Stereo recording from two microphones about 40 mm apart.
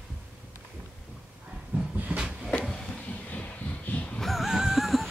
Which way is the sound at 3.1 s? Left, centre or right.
Left.